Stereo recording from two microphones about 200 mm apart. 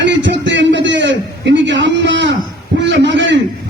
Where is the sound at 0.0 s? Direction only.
65° right (ahead or behind).